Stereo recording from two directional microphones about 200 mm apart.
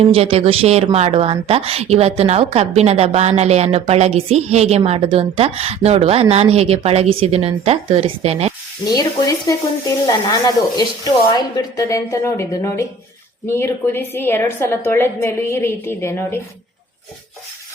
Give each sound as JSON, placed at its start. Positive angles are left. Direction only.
{"t": 0.0, "sound": "a woman's voice", "side_deg": -30}
{"t": 8.9, "sound": "a woman's voice", "side_deg": 15}